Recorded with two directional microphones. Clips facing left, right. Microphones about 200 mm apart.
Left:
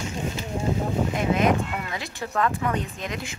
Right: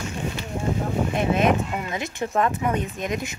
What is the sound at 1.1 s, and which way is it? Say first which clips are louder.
Speech: right 2 dB; 25° right (ahead or behind).